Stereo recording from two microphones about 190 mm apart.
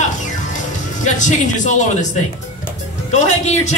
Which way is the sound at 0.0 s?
40° left (ahead or behind).